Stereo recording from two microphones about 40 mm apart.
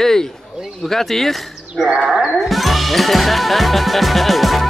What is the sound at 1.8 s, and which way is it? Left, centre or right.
Music, centre.